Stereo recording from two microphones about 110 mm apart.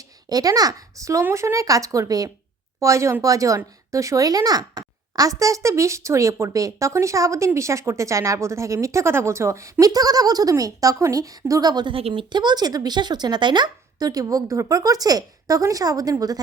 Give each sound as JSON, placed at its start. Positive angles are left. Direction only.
{"t": 0.3, "sound": "speech", "side_deg": -35}
{"t": 11.9, "sound": "speech", "side_deg": -55}